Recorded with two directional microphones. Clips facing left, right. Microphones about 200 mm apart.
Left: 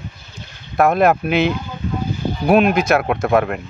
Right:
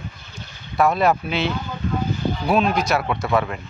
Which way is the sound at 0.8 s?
55° left (ahead or behind).